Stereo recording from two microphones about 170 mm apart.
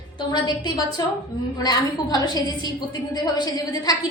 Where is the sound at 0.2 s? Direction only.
25° left (ahead or behind).